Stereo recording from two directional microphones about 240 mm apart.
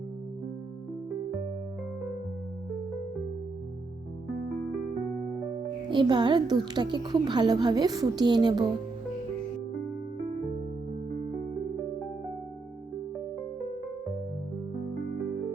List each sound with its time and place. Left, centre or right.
5.9 s a woman's voice: centre